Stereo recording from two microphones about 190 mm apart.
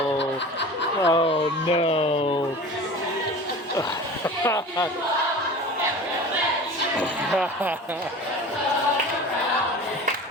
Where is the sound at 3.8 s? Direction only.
15° left (ahead or behind).